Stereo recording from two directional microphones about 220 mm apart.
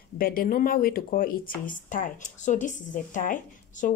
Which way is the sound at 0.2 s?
40° left (ahead or behind).